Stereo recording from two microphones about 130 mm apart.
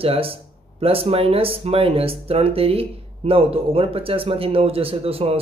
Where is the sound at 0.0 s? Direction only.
45° right (ahead or behind).